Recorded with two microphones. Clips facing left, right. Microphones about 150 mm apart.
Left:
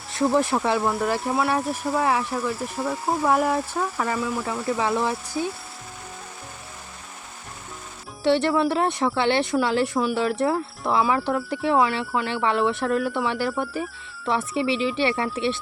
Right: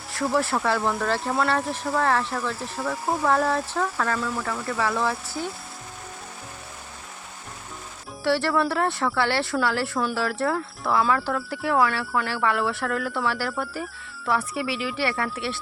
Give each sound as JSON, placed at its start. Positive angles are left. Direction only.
{"t": 0.1, "sound": "speech", "side_deg": 20}
{"t": 8.2, "sound": "speech", "side_deg": 20}